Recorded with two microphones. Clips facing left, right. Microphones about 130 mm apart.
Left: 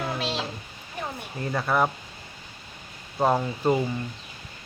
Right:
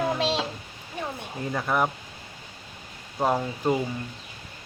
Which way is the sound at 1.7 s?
15° right (ahead or behind).